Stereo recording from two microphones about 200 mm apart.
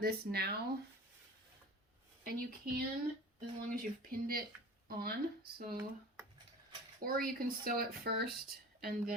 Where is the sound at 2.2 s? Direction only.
50° right (ahead or behind).